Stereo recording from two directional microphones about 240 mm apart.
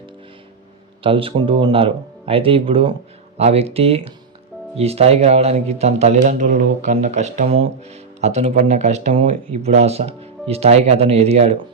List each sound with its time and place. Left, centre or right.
1.0 s speech: right